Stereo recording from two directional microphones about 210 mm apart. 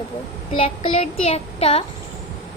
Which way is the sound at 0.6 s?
25° left (ahead or behind).